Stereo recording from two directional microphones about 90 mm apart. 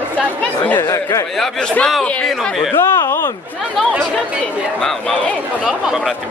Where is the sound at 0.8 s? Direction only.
35° left (ahead or behind).